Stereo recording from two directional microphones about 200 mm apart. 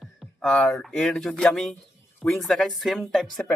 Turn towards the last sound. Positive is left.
turn(degrees=0)  # may be behind; listen again after turning